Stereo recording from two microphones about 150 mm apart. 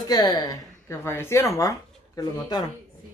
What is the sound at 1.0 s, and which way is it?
Speech, 15° left (ahead or behind).